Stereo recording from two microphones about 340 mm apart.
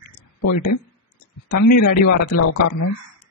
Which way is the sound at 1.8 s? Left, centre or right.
Left.